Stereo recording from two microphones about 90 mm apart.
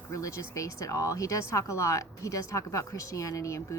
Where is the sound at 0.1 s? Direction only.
35° left (ahead or behind).